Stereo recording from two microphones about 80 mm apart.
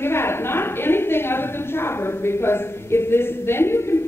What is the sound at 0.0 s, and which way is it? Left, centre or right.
A woman's voice, left.